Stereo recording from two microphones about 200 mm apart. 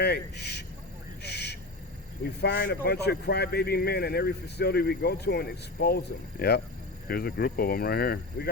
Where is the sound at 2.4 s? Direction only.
60° left (ahead or behind).